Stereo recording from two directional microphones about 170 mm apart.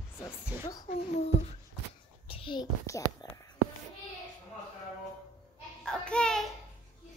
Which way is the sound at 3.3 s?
20° left (ahead or behind).